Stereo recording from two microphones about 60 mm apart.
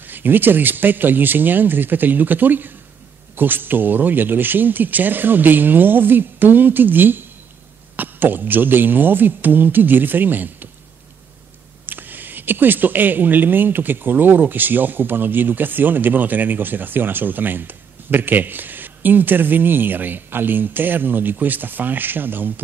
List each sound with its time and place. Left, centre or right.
0.0 s speech: right
11.8 s speech: right